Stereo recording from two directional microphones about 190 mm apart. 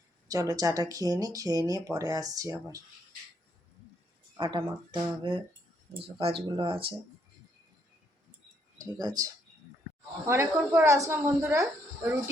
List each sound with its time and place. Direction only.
0.3 s speech: 20° right (ahead or behind)
4.4 s speech: 25° right (ahead or behind)
8.8 s speech: 20° right (ahead or behind)